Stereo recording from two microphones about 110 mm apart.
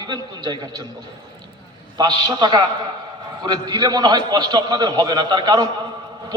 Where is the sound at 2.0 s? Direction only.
40° right (ahead or behind).